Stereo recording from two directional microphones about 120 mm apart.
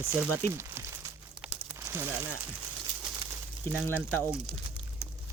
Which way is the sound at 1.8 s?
20° right (ahead or behind).